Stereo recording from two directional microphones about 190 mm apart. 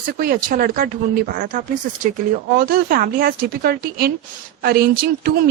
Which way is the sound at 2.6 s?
50° right (ahead or behind).